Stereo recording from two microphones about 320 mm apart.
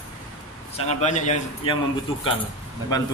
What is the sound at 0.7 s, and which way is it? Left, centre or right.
A man's voice, left.